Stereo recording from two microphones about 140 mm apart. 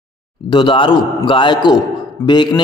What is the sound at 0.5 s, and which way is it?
A man's voice, 35° left (ahead or behind).